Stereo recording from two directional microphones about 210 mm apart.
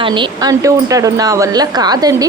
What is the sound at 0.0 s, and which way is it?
A woman's voice, 20° right (ahead or behind).